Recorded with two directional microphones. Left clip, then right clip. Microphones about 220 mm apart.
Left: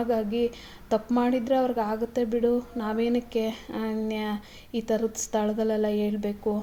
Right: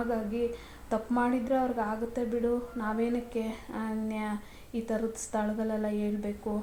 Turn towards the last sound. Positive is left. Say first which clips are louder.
# left 6 dB
turn(degrees=35)  # may be behind; listen again after turning